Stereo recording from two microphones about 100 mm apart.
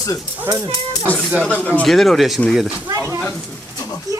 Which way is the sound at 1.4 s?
15° left (ahead or behind).